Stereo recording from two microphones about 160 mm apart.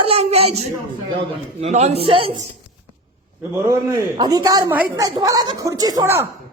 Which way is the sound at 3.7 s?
25° right (ahead or behind).